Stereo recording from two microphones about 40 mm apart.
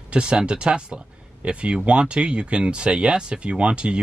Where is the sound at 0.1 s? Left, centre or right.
Right.